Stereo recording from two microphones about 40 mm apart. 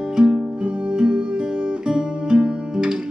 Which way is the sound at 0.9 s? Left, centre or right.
Right.